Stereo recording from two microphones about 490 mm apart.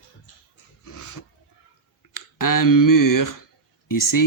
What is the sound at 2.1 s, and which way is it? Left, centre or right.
A man's voice, left.